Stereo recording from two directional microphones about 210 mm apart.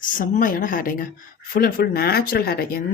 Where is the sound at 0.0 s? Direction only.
40° left (ahead or behind).